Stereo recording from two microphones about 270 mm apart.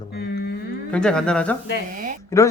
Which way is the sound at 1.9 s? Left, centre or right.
Right.